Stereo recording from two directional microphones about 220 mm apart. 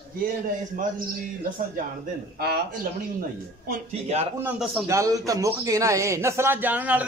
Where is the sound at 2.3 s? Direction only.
45° right (ahead or behind).